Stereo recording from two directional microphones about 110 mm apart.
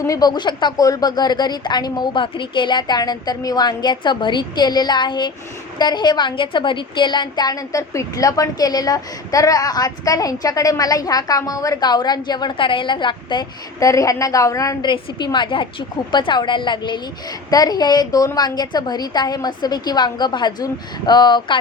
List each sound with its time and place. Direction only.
0.1 s a woman's voice: 40° left (ahead or behind)
13.7 s a woman's voice: 30° left (ahead or behind)
14.8 s a woman's voice: 45° left (ahead or behind)